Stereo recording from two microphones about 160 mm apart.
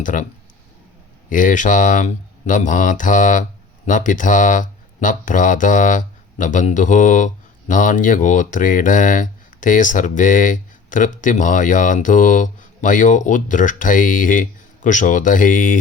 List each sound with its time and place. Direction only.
0.0 s speech: 55° left (ahead or behind)
1.3 s speech: 55° left (ahead or behind)